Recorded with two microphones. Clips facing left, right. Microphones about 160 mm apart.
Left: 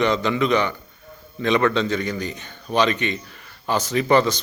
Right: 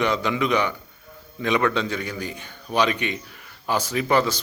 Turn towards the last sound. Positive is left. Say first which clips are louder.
# left 3 dB
turn(degrees=-5)  # may be behind; listen again after turning